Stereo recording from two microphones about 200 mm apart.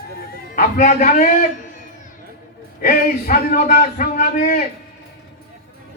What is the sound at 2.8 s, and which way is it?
A man's voice, 45° left (ahead or behind).